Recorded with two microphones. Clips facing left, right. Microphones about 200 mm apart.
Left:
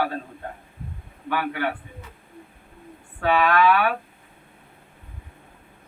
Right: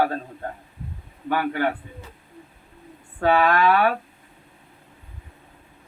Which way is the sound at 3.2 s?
40° right (ahead or behind).